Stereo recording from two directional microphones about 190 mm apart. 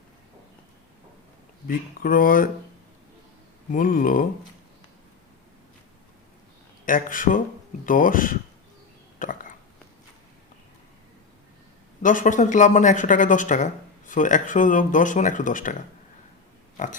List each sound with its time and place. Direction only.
1.6 s speech: 50° left (ahead or behind)
3.7 s speech: 45° left (ahead or behind)
6.8 s speech: 45° left (ahead or behind)
9.1 s a sound: 45° left (ahead or behind)
12.0 s speech: 45° left (ahead or behind)
16.7 s pig: 40° left (ahead or behind)